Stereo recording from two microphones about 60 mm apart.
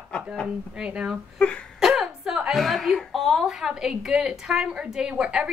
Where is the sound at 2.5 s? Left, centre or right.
Centre.